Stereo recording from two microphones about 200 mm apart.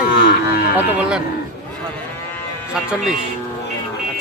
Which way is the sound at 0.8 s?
10° right (ahead or behind).